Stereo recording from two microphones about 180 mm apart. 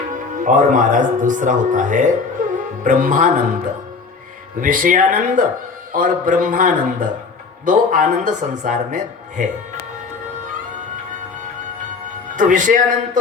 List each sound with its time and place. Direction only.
0.4 s speech: 45° right (ahead or behind)
2.4 s music: 50° right (ahead or behind)
2.8 s speech: 50° right (ahead or behind)
4.6 s speech: 50° right (ahead or behind)
12.4 s speech: 45° right (ahead or behind)